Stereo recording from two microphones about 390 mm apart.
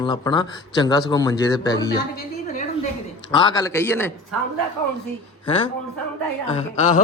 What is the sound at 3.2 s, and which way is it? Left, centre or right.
Speech, centre.